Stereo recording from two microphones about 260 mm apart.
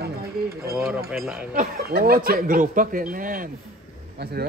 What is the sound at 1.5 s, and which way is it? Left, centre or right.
Speech, right.